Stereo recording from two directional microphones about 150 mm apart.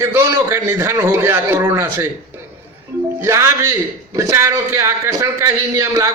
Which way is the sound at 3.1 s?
15° right (ahead or behind).